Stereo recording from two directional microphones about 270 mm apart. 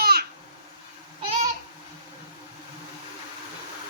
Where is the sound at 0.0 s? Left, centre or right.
Right.